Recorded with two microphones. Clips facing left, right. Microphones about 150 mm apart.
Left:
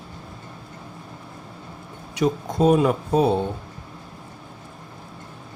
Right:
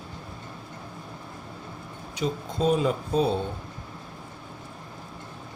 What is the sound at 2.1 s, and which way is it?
Speech, 70° left (ahead or behind).